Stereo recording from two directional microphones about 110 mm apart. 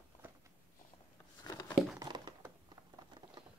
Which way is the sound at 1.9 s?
40° right (ahead or behind).